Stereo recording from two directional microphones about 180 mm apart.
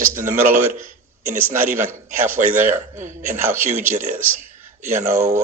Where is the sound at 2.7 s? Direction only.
45° right (ahead or behind).